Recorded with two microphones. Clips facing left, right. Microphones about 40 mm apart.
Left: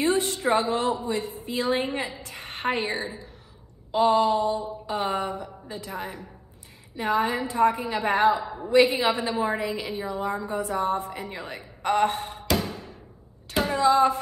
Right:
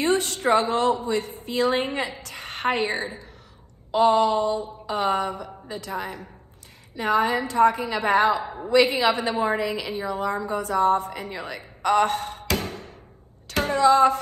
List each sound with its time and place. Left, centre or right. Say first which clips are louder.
0.3 s a woman's voice: right 2 dB; right
3.9 s a woman's voice: right 2 dB; right
5.9 s a woman's voice: right 4 dB; right